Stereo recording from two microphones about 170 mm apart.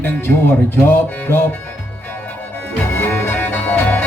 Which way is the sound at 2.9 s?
15° left (ahead or behind).